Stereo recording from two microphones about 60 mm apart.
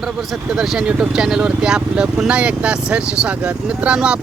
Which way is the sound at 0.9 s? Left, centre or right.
Centre.